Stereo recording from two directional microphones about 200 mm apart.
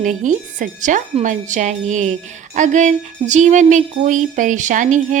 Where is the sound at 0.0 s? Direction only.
40° right (ahead or behind).